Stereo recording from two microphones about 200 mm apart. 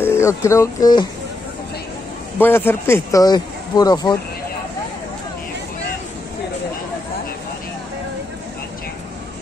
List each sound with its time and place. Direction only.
0.0 s speech: 15° left (ahead or behind)
2.3 s speech: 10° left (ahead or behind)